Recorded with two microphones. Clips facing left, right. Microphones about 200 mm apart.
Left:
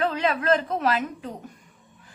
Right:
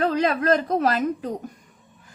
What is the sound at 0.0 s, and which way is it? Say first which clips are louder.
A woman's voice: right 3 dB; 40° right (ahead or behind).